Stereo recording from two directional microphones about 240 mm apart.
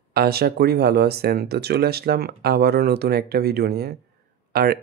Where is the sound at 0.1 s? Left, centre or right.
Right.